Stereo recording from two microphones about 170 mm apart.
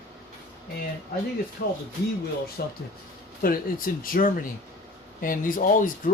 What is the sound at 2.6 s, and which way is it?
Speech, 65° left (ahead or behind).